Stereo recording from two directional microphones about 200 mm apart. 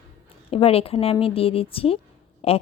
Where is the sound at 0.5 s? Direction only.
30° left (ahead or behind).